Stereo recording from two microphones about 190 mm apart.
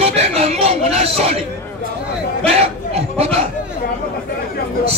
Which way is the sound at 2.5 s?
35° right (ahead or behind).